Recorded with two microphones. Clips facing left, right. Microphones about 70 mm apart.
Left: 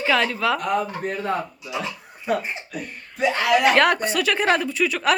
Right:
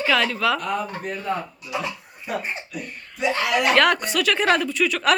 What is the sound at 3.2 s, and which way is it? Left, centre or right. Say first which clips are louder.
Speech: left 3 dB; left.